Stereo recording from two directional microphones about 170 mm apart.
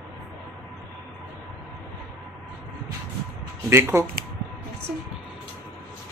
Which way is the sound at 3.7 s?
15° right (ahead or behind).